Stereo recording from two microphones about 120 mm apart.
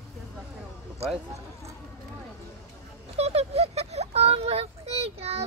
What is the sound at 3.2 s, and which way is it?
Speech, 55° right (ahead or behind).